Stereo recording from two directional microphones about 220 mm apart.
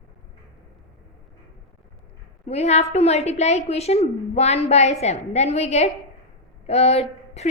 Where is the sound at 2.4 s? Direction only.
30° left (ahead or behind).